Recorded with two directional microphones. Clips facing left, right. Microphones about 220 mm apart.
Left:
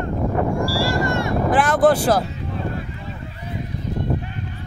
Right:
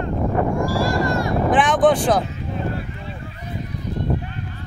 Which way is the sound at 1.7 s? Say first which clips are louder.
Left 2 dB; 5° left (ahead or behind).